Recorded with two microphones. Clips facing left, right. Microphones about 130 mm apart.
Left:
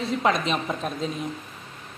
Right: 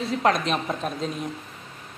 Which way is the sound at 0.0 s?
Centre (ahead or behind).